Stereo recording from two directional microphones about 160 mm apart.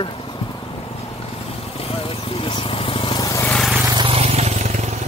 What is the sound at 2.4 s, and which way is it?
Vehicle, 35° left (ahead or behind).